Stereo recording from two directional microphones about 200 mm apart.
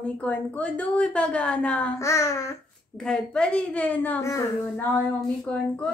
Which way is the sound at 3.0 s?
5° left (ahead or behind).